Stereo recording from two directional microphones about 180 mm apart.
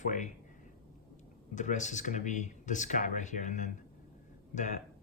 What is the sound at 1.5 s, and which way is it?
Speech, 45° left (ahead or behind).